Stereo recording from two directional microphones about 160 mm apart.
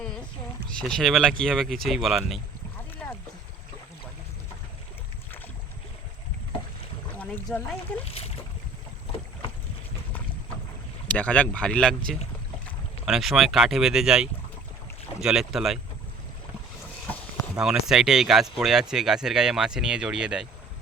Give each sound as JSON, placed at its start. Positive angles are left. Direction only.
{"t": 0.8, "sound": "speech", "side_deg": 5}
{"t": 3.0, "sound": "boat", "side_deg": 5}
{"t": 7.2, "sound": "speech", "side_deg": 10}
{"t": 11.1, "sound": "speech", "side_deg": 10}
{"t": 17.6, "sound": "speech", "side_deg": -5}